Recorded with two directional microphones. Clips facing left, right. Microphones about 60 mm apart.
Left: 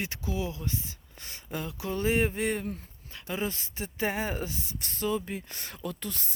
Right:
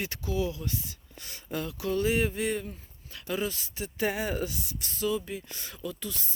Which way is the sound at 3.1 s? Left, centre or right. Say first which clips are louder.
Right 1 dB; left.